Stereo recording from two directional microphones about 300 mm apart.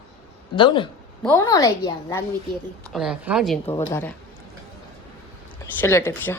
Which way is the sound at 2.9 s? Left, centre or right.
Centre.